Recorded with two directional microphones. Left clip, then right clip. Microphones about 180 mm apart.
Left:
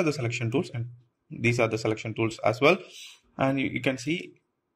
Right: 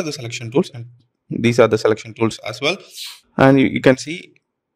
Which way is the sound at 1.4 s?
35° right (ahead or behind).